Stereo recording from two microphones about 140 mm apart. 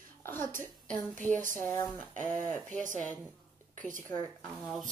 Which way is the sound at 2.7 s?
65° right (ahead or behind).